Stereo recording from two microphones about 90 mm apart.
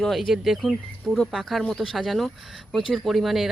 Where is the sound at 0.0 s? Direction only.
Centre (ahead or behind).